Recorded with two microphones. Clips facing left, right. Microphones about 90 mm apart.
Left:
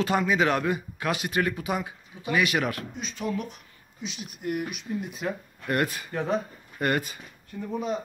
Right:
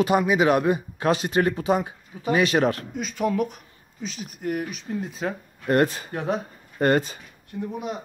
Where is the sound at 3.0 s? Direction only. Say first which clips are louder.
Right 8 dB; 50° right (ahead or behind).